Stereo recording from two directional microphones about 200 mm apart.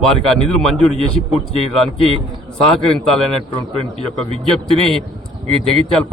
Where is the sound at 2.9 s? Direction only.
Centre (ahead or behind).